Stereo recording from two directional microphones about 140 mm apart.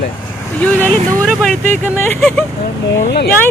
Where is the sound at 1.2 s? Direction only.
5° left (ahead or behind).